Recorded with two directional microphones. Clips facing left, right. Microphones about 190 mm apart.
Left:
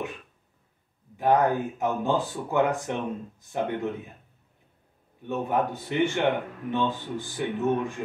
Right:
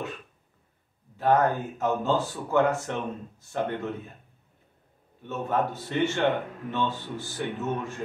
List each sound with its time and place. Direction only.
1.1 s speech: 15° left (ahead or behind)
5.3 s speech: 15° left (ahead or behind)